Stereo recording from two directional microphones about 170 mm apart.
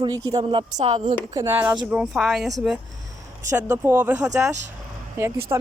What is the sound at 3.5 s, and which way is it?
Speech, 15° right (ahead or behind).